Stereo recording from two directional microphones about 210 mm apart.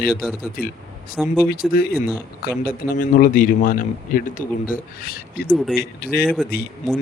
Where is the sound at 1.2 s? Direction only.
Centre (ahead or behind).